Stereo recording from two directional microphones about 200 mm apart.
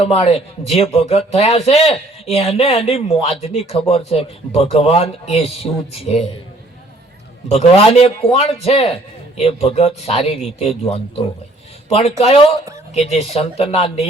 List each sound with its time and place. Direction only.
0.0 s speech: 30° left (ahead or behind)
7.4 s a man's voice: 30° left (ahead or behind)